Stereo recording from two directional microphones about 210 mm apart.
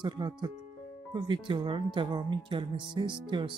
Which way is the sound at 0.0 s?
20° right (ahead or behind).